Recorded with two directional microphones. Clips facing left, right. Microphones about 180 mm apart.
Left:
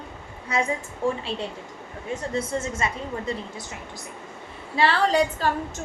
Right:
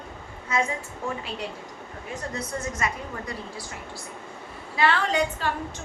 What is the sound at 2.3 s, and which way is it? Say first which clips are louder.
A woman's voice: left 5 dB; 25° left (ahead or behind).